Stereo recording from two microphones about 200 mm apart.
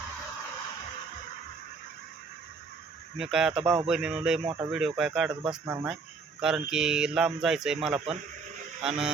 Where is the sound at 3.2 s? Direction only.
Centre (ahead or behind).